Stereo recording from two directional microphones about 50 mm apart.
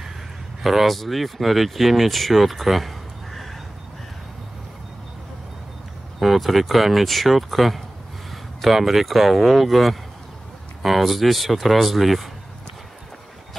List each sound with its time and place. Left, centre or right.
0.6 s speech: centre
6.1 s speech: centre